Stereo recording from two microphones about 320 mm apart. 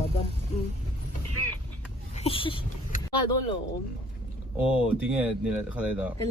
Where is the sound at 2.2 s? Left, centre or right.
Centre.